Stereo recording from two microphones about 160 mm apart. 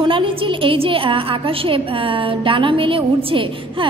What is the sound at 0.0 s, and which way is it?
A woman's voice, 30° right (ahead or behind).